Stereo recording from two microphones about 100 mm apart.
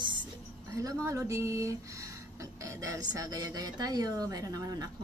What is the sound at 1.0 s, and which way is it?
Speech, 30° right (ahead or behind).